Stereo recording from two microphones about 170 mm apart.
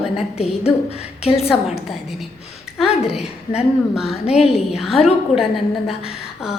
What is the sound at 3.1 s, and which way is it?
A woman's voice, 5° right (ahead or behind).